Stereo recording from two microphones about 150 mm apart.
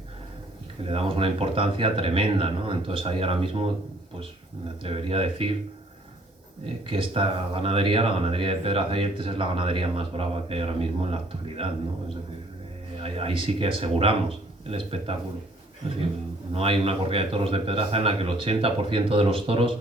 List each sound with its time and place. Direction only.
0.9 s speech: 35° right (ahead or behind)
4.8 s speech: 40° right (ahead or behind)
6.8 s speech: 35° right (ahead or behind)
13.0 s speech: 40° right (ahead or behind)
16.6 s speech: 40° right (ahead or behind)